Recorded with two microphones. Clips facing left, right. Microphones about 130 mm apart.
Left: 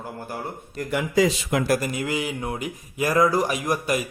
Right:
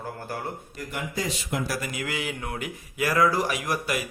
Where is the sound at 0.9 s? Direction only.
90° left.